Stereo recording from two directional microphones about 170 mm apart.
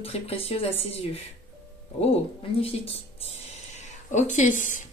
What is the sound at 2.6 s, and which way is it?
Speech, 35° left (ahead or behind).